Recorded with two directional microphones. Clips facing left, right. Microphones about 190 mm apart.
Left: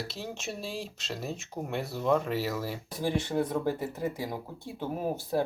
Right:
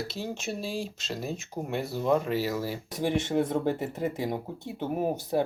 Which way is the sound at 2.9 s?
20° right (ahead or behind).